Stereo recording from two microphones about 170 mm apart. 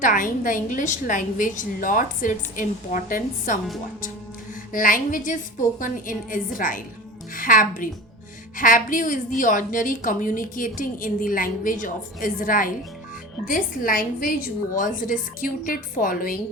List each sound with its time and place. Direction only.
0.0 s a woman's voice: 50° left (ahead or behind)
4.7 s a woman's voice: 55° left (ahead or behind)